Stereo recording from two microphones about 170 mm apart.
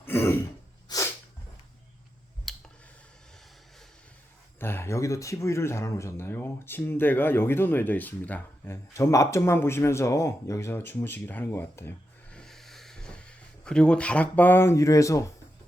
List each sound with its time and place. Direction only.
0.0 s throat clearing: 15° left (ahead or behind)
0.9 s sneeze: 20° left (ahead or behind)
2.5 s clicking: centre (ahead or behind)
4.6 s speech: 15° left (ahead or behind)